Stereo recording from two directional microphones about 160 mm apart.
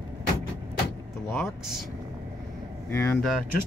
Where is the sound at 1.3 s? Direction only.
Centre (ahead or behind).